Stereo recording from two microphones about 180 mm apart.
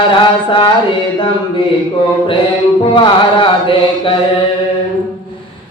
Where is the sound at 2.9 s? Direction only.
25° left (ahead or behind).